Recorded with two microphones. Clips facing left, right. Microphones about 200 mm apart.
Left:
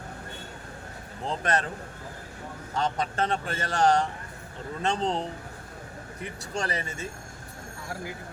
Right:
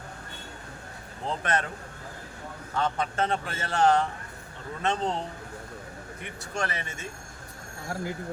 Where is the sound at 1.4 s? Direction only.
35° left (ahead or behind).